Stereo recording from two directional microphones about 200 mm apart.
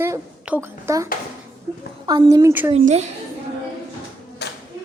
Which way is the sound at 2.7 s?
35° right (ahead or behind).